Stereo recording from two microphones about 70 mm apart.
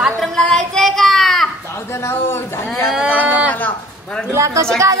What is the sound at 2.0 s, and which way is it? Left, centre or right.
Speech, left.